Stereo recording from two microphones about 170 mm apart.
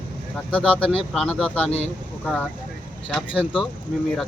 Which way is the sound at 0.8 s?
5° left (ahead or behind).